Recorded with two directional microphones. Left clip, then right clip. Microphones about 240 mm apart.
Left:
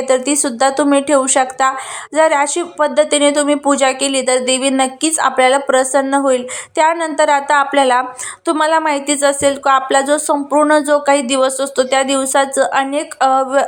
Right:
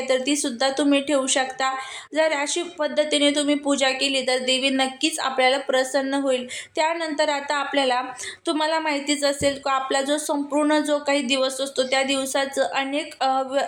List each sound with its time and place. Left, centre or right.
0.1 s speech: left